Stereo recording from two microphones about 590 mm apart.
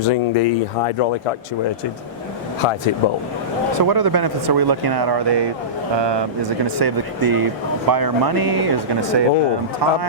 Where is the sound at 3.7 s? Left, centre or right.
Right.